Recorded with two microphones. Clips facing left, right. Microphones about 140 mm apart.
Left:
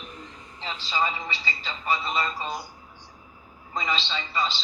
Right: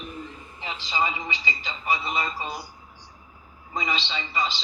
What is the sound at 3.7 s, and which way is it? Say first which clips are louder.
Speech: even; 10° right (ahead or behind).